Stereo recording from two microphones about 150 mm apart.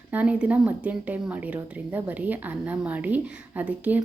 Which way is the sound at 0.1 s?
10° right (ahead or behind).